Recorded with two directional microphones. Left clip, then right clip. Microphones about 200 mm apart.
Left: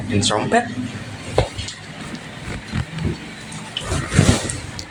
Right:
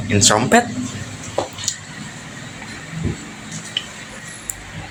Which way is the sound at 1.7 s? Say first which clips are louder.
Right 7 dB; 55° right (ahead or behind).